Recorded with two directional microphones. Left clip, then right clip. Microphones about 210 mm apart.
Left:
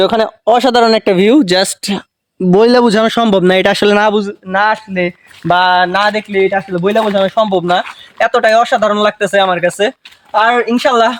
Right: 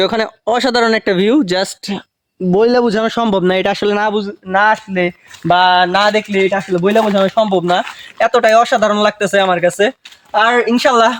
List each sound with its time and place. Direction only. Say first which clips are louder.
0.0 s a man's voice: left 4 dB; 15° left (ahead or behind); by 4.8 s 35° left (ahead or behind)
4.9 s speech: even; 15° left (ahead or behind); by 6.4 s centre (ahead or behind)
6.4 s speech: left 5 dB; 15° right (ahead or behind)
6.7 s speech: even; 5° left (ahead or behind)